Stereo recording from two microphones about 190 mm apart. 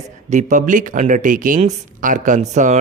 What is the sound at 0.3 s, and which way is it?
Speech, 40° right (ahead or behind).